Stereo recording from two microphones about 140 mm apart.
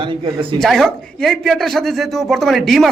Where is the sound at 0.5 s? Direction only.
5° left (ahead or behind).